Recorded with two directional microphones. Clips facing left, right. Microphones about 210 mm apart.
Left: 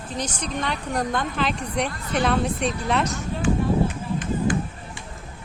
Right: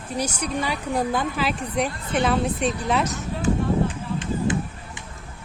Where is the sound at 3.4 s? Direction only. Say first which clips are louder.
Even; 30° right (ahead or behind).